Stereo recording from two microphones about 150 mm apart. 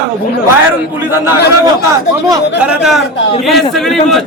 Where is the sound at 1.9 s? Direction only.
20° right (ahead or behind).